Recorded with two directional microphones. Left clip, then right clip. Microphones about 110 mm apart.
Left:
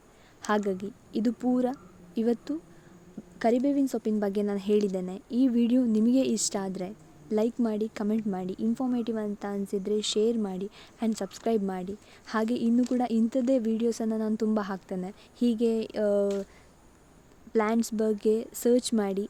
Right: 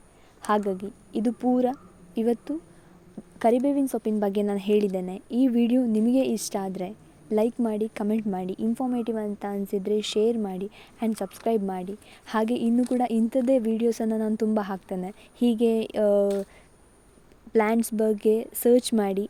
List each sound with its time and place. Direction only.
0.4 s a woman's voice: 10° right (ahead or behind)
12.2 s a woman's voice: 25° right (ahead or behind)
17.5 s a woman's voice: 30° right (ahead or behind)